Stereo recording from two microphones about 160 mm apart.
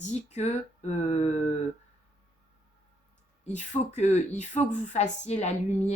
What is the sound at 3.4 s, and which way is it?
Speech, 45° left (ahead or behind).